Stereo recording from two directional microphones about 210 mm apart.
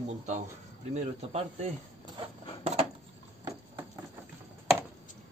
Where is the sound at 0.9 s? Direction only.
30° right (ahead or behind).